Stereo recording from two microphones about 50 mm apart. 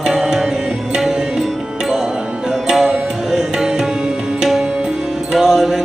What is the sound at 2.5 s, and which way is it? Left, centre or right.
Music, centre.